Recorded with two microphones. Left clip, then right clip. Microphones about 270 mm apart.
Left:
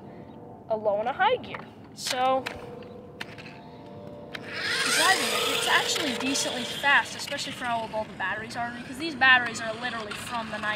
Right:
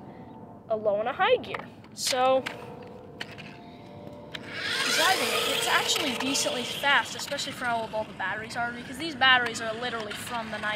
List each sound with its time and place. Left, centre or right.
0.7 s speech: centre
4.5 s speech: centre
6.9 s speech: centre
8.6 s speech: centre
8.9 s speech: centre
10.0 s speech: centre